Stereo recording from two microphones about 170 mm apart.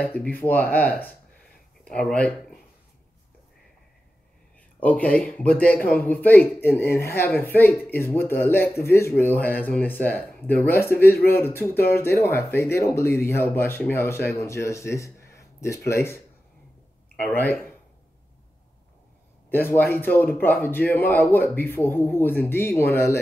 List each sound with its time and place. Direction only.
0.0 s a man's voice: 10° left (ahead or behind)
4.7 s a man's voice: 10° left (ahead or behind)
17.2 s a man's voice: 10° left (ahead or behind)
19.5 s a man's voice: 10° left (ahead or behind)